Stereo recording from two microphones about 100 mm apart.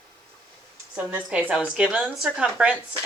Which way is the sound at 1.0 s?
10° right (ahead or behind).